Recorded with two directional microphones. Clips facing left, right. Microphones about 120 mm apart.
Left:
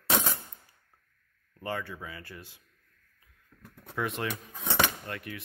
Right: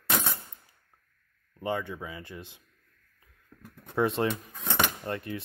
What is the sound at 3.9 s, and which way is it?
Speech, 30° right (ahead or behind).